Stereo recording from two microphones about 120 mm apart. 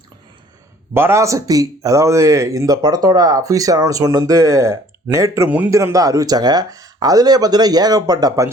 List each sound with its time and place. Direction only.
0.9 s speech: 20° right (ahead or behind)
5.5 s a man's voice: 15° right (ahead or behind)
5.7 s speech: 25° right (ahead or behind)